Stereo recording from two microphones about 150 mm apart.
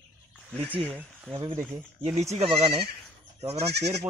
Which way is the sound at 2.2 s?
45° right (ahead or behind).